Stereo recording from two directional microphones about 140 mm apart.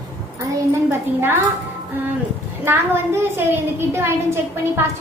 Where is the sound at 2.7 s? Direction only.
15° right (ahead or behind).